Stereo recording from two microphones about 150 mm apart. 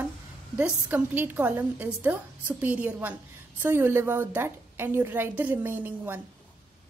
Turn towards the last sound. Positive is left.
turn(degrees=-15)  # may be behind; listen again after turning